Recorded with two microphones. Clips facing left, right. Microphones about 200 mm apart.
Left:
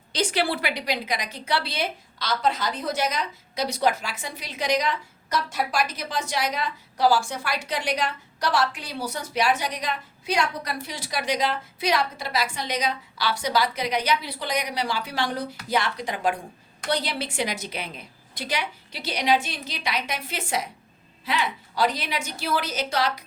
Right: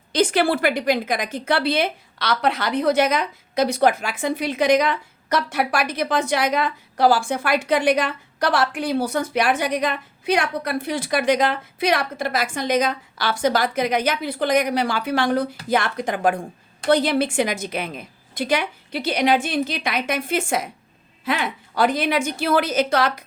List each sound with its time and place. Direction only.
0.1 s a woman's voice: 50° right (ahead or behind)